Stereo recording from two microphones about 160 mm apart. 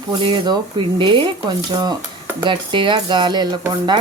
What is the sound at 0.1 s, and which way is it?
Speech, 30° right (ahead or behind).